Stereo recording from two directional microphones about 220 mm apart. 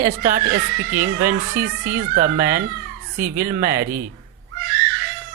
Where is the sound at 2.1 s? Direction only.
40° right (ahead or behind).